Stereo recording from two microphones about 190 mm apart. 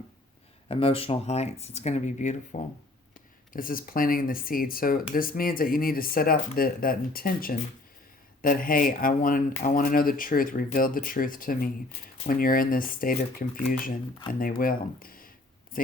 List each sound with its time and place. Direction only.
0.7 s speech: 30° left (ahead or behind); by 15.3 s 50° left (ahead or behind)